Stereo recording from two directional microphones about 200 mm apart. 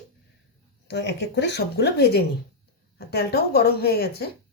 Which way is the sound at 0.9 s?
55° left (ahead or behind).